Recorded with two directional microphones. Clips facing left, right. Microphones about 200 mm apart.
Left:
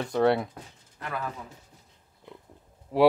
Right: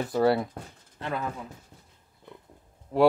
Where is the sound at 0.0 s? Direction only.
5° right (ahead or behind).